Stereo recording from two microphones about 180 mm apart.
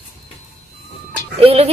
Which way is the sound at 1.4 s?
30° right (ahead or behind).